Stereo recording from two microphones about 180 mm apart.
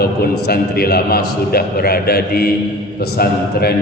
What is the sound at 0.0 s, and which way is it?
A man's voice, 60° left (ahead or behind).